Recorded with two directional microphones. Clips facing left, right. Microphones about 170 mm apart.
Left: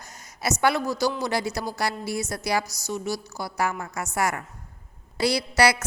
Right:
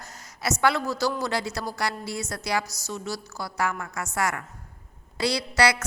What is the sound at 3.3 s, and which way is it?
A woman's voice, 25° left (ahead or behind).